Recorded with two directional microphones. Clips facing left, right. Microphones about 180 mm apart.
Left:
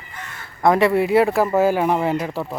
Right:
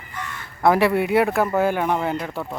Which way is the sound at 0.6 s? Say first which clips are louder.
Left 2 dB; 5° right (ahead or behind).